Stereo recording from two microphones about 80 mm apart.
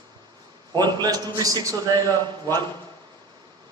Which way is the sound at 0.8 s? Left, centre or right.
Right.